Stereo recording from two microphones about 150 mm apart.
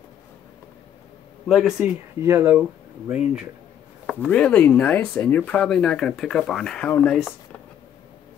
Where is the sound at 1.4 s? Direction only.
Centre (ahead or behind).